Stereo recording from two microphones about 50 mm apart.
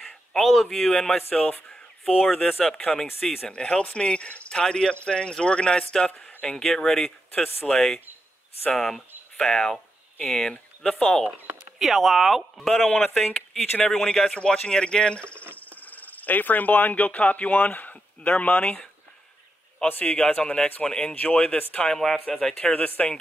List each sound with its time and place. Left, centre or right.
0.3 s speech: centre
1.7 s a sound: centre
2.6 s speech: centre
11.8 s speech: centre; by 15.4 s left
15.8 s speech: left
20.0 s a man's voice: centre
21.1 s a man's voice: left
21.8 s a man's voice: centre; by 23.1 s left